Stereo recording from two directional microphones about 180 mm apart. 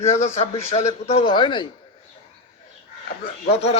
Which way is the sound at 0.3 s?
40° left (ahead or behind).